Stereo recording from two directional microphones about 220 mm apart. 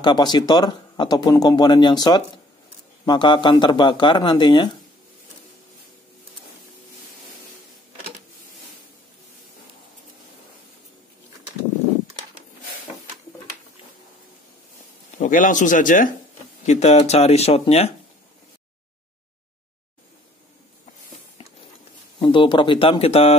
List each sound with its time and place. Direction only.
0.0 s speech: 20° left (ahead or behind)
15.1 s speech: 35° left (ahead or behind)
22.2 s speech: 20° left (ahead or behind)